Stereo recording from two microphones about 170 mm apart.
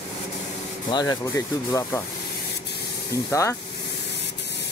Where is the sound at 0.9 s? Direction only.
20° left (ahead or behind).